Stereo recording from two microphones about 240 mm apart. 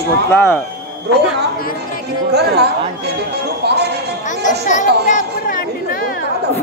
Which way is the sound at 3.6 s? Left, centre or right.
Right.